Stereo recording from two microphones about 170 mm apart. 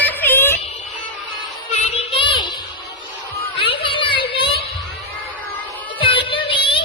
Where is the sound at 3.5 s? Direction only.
30° left (ahead or behind).